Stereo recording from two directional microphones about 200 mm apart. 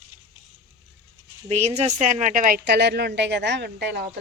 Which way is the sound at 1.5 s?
35° right (ahead or behind).